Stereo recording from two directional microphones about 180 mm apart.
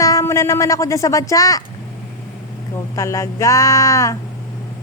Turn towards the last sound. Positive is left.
turn(degrees=20)  # may be behind; listen again after turning